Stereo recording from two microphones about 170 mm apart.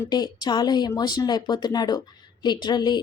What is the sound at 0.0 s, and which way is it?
A woman's voice, 25° left (ahead or behind).